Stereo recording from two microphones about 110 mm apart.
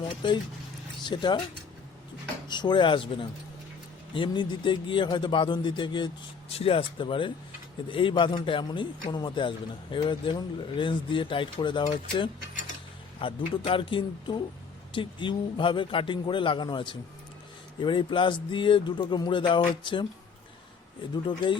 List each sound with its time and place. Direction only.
0.2 s a man's voice: 45° left (ahead or behind)
2.5 s a man's voice: 45° left (ahead or behind)
6.6 s a man's voice: 60° left (ahead or behind)
13.2 s a man's voice: 50° left (ahead or behind)
21.2 s a man's voice: 45° left (ahead or behind)